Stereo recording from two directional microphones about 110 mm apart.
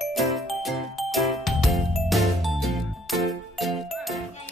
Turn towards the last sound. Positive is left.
turn(degrees=0)  # may be behind; listen again after turning